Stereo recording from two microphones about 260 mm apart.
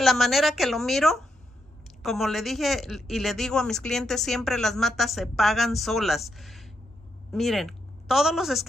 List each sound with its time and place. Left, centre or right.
0.0 s a woman's voice: centre